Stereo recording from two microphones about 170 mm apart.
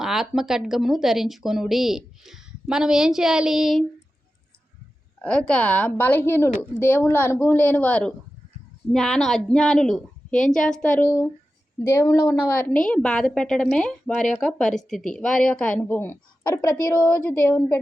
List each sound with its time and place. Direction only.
0.0 s speech: centre (ahead or behind)
5.2 s speech: 5° left (ahead or behind)
12.5 s speech: 10° left (ahead or behind)